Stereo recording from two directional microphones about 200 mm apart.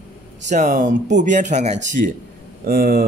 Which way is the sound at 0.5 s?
40° right (ahead or behind).